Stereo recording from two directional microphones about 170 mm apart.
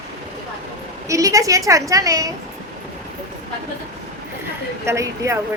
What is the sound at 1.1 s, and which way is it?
A woman's voice, 20° right (ahead or behind).